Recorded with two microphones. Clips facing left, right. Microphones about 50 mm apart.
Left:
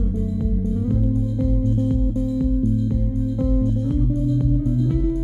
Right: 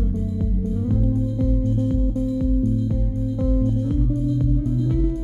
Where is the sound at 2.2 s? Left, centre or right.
Centre.